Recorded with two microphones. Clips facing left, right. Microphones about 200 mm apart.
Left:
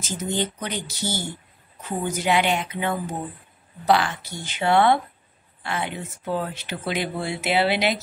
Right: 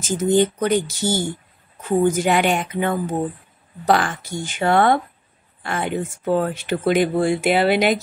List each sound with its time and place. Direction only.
0.0 s speech: 50° right (ahead or behind)